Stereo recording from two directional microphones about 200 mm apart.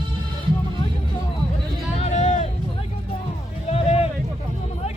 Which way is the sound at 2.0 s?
35° left (ahead or behind).